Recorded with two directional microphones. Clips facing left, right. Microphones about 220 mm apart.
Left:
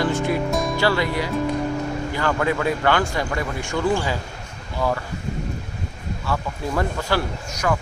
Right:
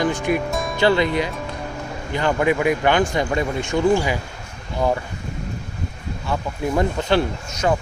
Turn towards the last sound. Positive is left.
turn(degrees=-25)  # may be behind; listen again after turning